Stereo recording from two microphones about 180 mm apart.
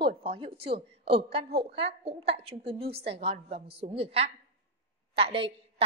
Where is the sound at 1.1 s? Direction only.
30° right (ahead or behind).